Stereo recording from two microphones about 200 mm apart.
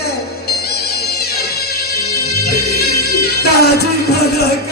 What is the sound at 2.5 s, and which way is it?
Music, 50° left (ahead or behind).